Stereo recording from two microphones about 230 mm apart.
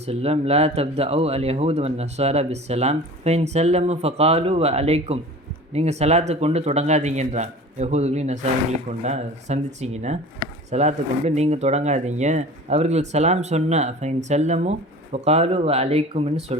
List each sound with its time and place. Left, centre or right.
0.0 s speech: right